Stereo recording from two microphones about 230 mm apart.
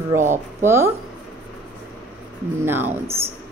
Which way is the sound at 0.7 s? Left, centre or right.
Centre.